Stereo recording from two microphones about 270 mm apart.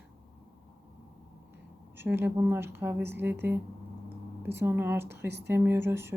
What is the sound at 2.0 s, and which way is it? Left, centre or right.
A woman's voice, centre.